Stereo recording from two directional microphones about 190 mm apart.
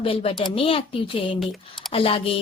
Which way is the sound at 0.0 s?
30° left (ahead or behind).